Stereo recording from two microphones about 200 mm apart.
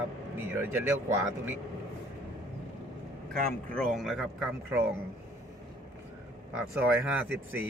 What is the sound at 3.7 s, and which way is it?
Speech, centre (ahead or behind).